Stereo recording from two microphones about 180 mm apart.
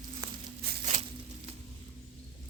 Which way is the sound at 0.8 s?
35° right (ahead or behind).